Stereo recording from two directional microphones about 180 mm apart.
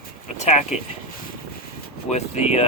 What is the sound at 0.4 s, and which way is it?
Speech, 40° left (ahead or behind).